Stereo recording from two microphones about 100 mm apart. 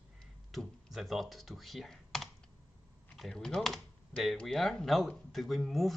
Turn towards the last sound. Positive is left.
turn(degrees=0)  # may be behind; listen again after turning